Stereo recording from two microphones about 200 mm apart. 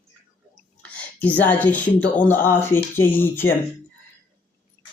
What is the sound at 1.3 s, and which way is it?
Speech, 10° left (ahead or behind).